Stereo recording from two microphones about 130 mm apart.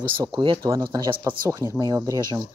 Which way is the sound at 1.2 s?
20° right (ahead or behind).